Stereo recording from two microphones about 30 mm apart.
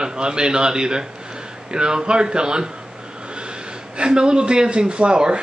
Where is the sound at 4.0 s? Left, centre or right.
Right.